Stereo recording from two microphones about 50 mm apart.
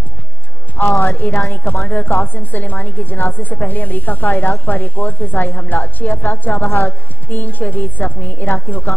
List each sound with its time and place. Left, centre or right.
0.7 s a woman's voice: left